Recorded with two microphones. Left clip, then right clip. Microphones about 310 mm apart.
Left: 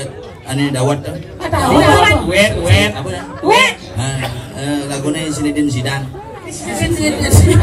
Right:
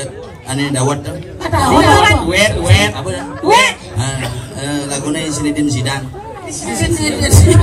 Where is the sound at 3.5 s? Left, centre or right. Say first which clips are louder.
Right 2 dB; centre.